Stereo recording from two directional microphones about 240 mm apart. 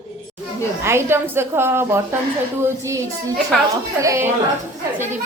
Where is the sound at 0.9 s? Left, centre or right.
Centre.